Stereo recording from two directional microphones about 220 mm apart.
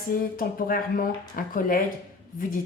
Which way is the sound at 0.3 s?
40° left (ahead or behind).